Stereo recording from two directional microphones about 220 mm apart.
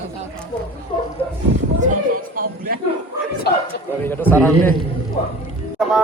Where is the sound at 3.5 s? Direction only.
45° left (ahead or behind).